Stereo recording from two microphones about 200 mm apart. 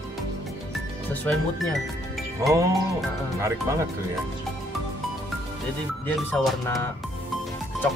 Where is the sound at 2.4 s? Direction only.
15° right (ahead or behind).